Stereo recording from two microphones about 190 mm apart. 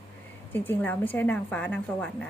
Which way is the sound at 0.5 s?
10° left (ahead or behind).